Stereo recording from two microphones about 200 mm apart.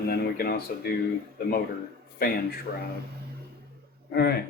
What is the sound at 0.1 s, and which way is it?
Speech, 50° left (ahead or behind).